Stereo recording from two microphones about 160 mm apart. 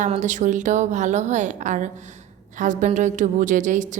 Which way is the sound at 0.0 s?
50° right (ahead or behind).